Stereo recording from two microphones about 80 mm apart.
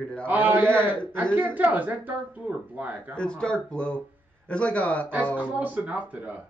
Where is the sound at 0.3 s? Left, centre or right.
Right.